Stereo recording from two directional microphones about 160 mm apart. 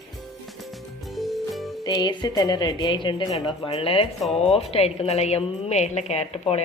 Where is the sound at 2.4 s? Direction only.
25° left (ahead or behind).